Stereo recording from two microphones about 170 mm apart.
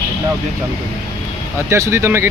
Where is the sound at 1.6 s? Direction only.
15° right (ahead or behind).